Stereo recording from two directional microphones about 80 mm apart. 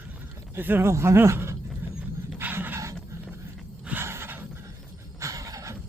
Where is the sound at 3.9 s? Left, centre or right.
Right.